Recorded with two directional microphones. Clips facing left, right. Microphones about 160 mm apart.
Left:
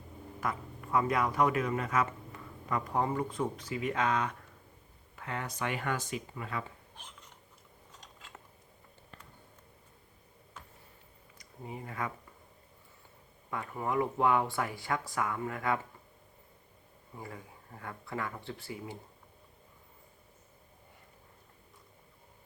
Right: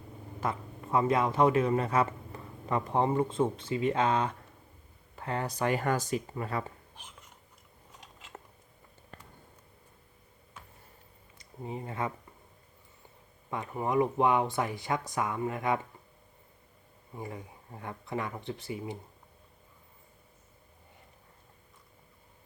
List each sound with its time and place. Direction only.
0.3 s speech: 25° right (ahead or behind)
11.3 s speech: 25° right (ahead or behind)
13.5 s speech: 20° right (ahead or behind)
17.2 s speech: 20° right (ahead or behind)